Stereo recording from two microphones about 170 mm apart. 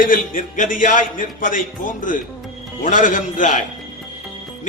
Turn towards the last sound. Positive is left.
turn(degrees=50)  # may be behind; listen again after turning